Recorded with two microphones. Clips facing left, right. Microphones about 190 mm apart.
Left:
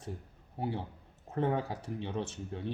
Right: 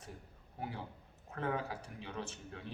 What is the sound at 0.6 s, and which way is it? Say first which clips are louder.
A man's voice: left 7 dB; 30° left (ahead or behind).